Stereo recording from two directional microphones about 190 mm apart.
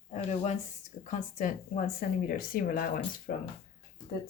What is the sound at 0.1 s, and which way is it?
Speech, 35° left (ahead or behind).